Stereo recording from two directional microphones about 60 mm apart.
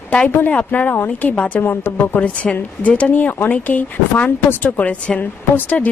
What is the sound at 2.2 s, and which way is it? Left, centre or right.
Speech, left.